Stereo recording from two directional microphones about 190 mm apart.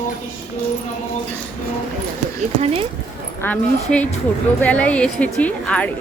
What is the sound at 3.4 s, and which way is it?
A woman's voice, 10° left (ahead or behind).